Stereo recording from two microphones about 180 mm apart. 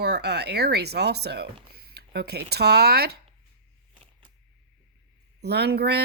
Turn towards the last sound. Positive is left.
turn(degrees=-65)  # may be behind; listen again after turning